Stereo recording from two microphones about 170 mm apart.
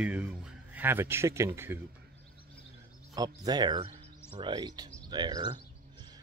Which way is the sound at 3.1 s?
20° right (ahead or behind).